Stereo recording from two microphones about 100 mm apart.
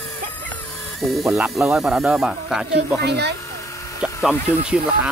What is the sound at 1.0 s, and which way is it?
Speech, centre (ahead or behind).